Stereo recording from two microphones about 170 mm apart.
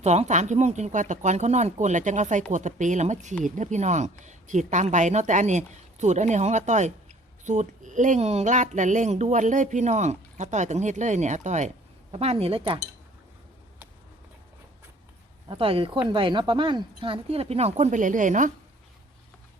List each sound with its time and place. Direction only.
0.0 s speech: 40° right (ahead or behind)
15.4 s speech: 35° right (ahead or behind); by 18.5 s 50° right (ahead or behind)